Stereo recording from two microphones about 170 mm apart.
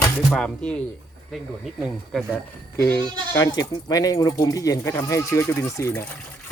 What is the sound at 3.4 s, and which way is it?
Speech, 20° left (ahead or behind).